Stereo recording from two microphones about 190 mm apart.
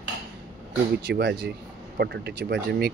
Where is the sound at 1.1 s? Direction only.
60° right (ahead or behind).